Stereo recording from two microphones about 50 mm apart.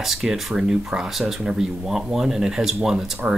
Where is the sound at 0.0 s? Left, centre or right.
Centre.